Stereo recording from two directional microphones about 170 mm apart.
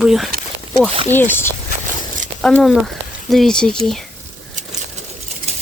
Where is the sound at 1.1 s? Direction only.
10° left (ahead or behind).